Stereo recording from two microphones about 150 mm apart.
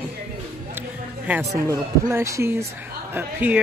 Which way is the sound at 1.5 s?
20° right (ahead or behind).